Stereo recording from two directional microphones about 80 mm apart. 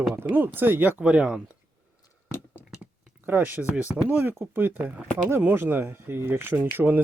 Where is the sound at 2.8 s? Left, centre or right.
Right.